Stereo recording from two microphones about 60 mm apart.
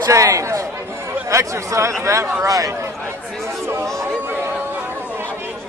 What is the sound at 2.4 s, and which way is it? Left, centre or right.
Speech, right.